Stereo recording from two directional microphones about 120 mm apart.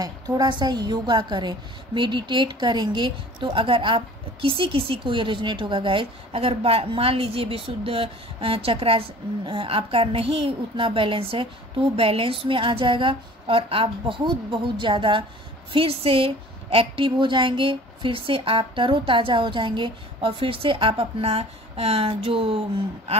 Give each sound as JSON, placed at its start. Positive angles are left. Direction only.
{"t": 0.0, "sound": "a woman's voice", "side_deg": -35}